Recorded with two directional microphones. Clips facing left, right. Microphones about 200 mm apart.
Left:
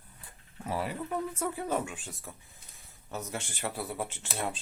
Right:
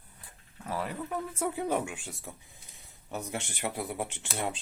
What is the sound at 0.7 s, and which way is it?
Speech, 5° left (ahead or behind).